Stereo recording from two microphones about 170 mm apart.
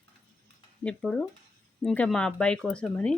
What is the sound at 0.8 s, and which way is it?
Speech, 5° left (ahead or behind).